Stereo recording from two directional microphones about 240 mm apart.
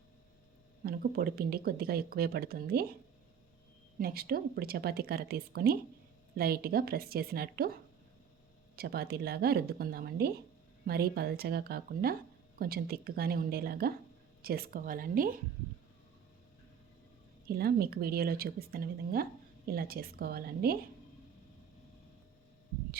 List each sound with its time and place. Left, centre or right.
0.9 s speech: right
4.0 s speech: right
8.7 s speech: right
17.5 s speech: right